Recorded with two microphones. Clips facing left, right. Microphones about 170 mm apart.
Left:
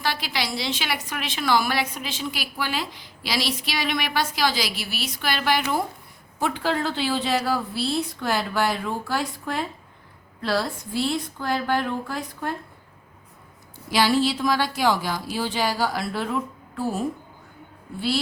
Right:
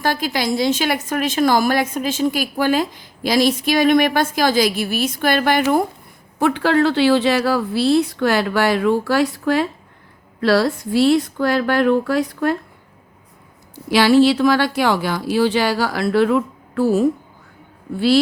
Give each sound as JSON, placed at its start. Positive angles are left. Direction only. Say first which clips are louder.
{"t": 0.0, "sound": "a woman's voice", "louder": "right 7 dB", "side_deg": -45}
{"t": 6.4, "sound": "a woman's voice", "louder": "right 9 dB", "side_deg": -75}
{"t": 13.9, "sound": "speech", "louder": "right 8 dB", "side_deg": -70}